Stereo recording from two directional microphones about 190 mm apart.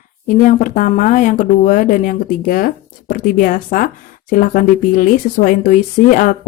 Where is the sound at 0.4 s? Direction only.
45° left (ahead or behind).